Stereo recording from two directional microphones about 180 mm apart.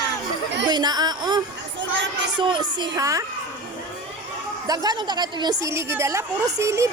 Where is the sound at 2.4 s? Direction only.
25° right (ahead or behind).